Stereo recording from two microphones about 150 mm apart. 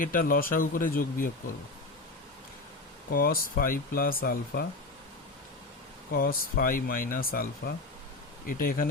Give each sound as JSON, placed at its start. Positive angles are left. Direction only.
{"t": 0.0, "sound": "speech", "side_deg": 70}
{"t": 3.1, "sound": "speech", "side_deg": 75}
{"t": 6.1, "sound": "speech", "side_deg": 80}
{"t": 8.4, "sound": "speech", "side_deg": 70}